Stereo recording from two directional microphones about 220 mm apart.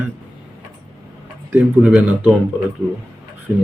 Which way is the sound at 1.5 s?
5° right (ahead or behind).